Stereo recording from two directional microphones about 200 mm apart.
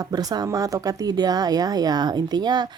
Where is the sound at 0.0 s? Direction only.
20° right (ahead or behind).